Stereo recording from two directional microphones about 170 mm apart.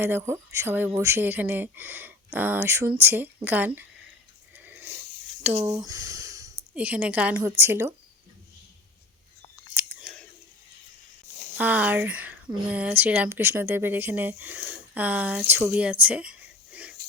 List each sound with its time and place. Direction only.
0.0 s speech: 15° right (ahead or behind)
4.5 s dog: 10° right (ahead or behind)
5.4 s a sound: 10° right (ahead or behind)
6.7 s speech: 10° right (ahead or behind)
9.7 s whispering: 10° right (ahead or behind)
11.5 s speech: 10° right (ahead or behind)